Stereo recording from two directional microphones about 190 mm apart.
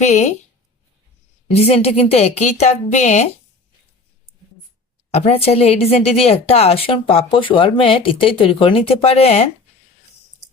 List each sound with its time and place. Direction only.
0.0 s a woman's voice: 35° left (ahead or behind)
1.5 s a woman's voice: 35° left (ahead or behind)
5.1 s a woman's voice: 30° left (ahead or behind)